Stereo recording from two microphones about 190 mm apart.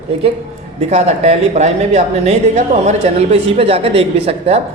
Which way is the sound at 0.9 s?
35° right (ahead or behind).